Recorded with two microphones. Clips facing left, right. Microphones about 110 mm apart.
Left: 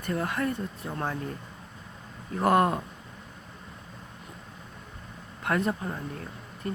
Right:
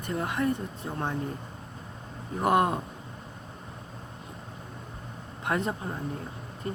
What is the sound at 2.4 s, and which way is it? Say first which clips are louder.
Speech: left 1 dB; 20° right (ahead or behind).